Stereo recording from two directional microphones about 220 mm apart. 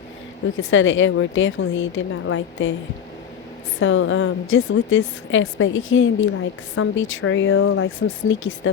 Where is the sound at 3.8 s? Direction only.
60° left (ahead or behind).